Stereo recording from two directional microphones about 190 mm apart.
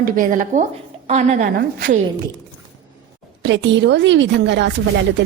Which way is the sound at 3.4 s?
70° right (ahead or behind).